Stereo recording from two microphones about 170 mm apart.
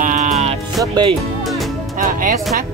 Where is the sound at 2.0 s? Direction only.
55° right (ahead or behind).